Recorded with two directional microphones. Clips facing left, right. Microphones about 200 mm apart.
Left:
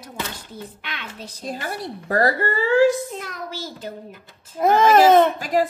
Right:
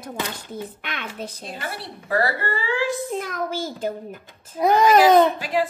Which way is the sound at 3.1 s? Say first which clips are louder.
Right 6 dB; 50° right (ahead or behind).